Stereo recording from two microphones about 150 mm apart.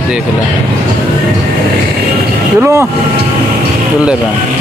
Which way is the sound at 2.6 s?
20° right (ahead or behind).